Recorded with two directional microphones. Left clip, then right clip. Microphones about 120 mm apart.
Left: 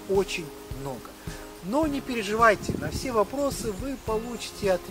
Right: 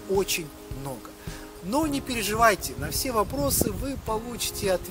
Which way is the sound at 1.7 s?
25° right (ahead or behind).